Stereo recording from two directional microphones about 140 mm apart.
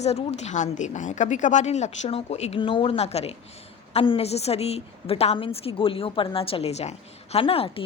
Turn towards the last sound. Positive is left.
turn(degrees=40)  # may be behind; listen again after turning